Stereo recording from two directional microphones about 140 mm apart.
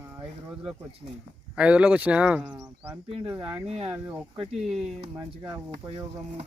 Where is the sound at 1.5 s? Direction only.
10° right (ahead or behind).